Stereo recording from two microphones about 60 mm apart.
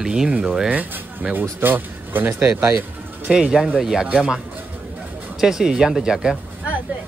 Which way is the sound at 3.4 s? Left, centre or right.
Centre.